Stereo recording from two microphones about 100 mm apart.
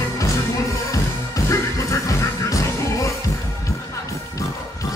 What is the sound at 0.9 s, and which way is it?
Music, 35° left (ahead or behind).